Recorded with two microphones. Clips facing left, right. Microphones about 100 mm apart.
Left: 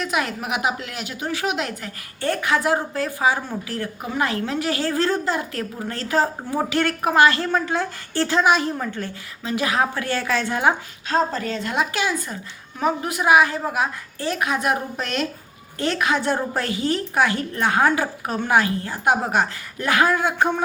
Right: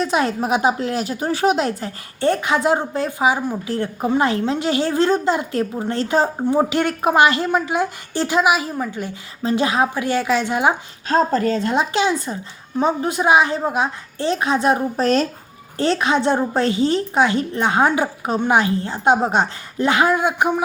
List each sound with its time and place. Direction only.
0.0 s speech: 30° right (ahead or behind); by 9.1 s 10° right (ahead or behind)
9.4 s a woman's voice: 30° right (ahead or behind)
11.1 s a woman's voice: 40° right (ahead or behind); by 20.6 s 15° right (ahead or behind)